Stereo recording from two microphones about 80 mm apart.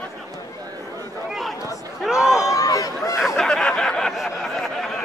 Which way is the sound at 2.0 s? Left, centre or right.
Centre.